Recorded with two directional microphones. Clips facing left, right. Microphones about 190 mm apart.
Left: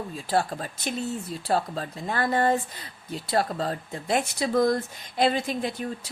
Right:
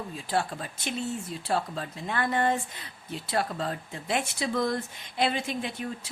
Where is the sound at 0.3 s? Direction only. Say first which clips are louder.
Left 4 dB; 40° left (ahead or behind).